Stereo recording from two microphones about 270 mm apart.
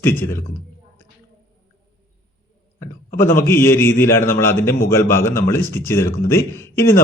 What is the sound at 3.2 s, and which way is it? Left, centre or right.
A man's voice, centre.